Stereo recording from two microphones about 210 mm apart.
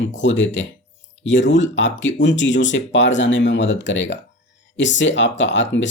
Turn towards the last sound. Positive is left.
turn(degrees=60)  # may be behind; listen again after turning